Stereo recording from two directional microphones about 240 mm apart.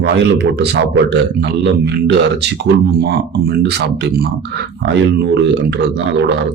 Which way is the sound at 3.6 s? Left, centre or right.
Right.